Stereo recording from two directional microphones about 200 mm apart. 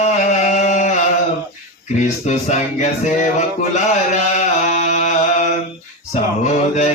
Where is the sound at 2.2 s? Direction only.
35° left (ahead or behind).